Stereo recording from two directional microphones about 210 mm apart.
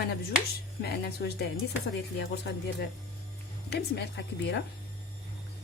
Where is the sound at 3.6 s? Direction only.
55° left (ahead or behind).